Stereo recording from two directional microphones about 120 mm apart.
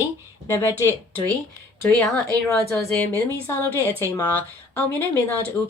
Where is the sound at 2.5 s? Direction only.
10° left (ahead or behind).